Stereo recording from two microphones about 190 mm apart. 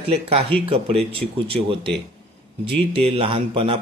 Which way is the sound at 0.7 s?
30° right (ahead or behind).